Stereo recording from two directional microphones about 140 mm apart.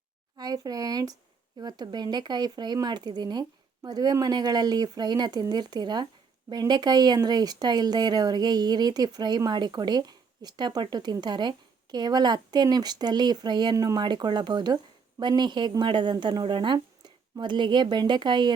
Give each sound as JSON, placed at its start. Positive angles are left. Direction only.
{"t": 0.3, "sound": "speech", "side_deg": -30}